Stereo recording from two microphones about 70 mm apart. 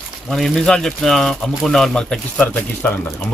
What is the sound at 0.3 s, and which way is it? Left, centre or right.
Speech, centre.